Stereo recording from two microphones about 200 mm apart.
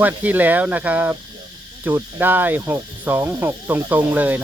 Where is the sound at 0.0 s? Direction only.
10° right (ahead or behind).